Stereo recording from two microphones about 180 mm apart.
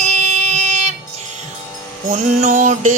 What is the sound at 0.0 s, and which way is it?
Child singing, 40° right (ahead or behind).